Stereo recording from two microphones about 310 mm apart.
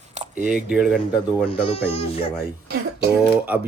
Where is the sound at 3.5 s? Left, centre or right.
Centre.